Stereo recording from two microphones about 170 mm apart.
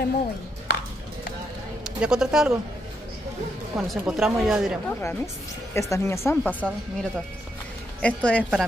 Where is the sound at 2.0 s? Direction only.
5° right (ahead or behind).